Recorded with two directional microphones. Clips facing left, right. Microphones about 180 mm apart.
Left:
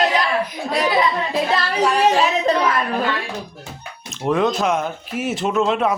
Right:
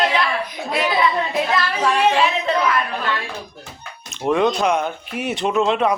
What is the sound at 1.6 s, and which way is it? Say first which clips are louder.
Speech: left 1 dB; 40° left (ahead or behind).